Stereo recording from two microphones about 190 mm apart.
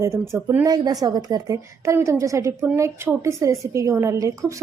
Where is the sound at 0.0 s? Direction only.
15° right (ahead or behind).